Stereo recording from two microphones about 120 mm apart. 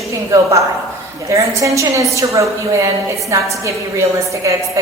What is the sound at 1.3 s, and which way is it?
A woman's voice, 25° right (ahead or behind).